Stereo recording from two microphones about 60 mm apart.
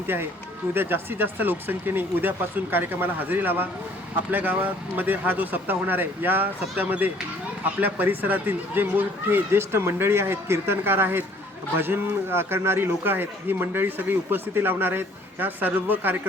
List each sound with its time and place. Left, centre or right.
0.7 s a man's voice: right